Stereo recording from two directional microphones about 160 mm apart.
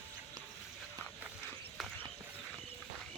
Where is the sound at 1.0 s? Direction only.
15° left (ahead or behind).